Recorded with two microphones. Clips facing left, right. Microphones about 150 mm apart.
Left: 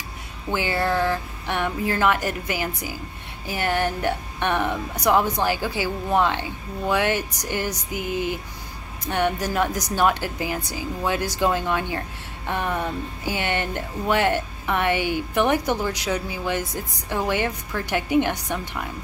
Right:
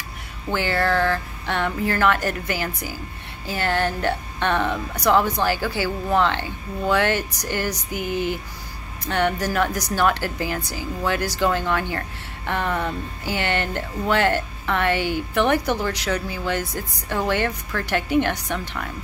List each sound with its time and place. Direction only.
0.5 s speech: 15° left (ahead or behind)